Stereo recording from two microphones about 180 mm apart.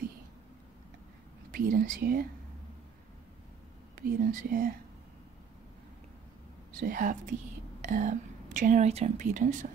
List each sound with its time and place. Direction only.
1.5 s speech: 50° right (ahead or behind)
3.9 s speech: 55° right (ahead or behind)
6.8 s speech: 50° right (ahead or behind)